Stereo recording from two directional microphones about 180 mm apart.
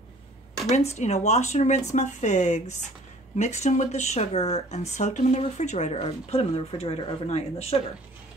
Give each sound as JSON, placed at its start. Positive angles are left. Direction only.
{"t": 0.7, "sound": "speech", "side_deg": 40}